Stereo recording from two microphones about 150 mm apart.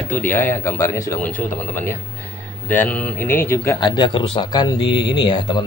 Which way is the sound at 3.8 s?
30° left (ahead or behind).